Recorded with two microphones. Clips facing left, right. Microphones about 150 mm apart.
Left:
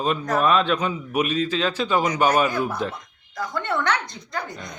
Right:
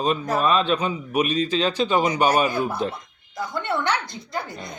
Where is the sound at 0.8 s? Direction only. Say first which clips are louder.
Right 1 dB; 10° right (ahead or behind).